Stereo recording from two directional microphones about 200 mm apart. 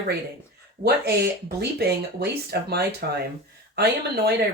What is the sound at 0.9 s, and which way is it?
Speech, 55° right (ahead or behind).